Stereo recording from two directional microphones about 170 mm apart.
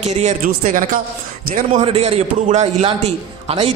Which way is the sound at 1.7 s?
35° right (ahead or behind).